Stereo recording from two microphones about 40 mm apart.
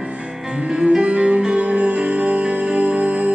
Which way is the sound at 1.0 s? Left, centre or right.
Right.